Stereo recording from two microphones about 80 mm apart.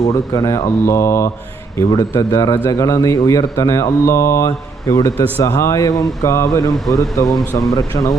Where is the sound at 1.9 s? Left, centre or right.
Left.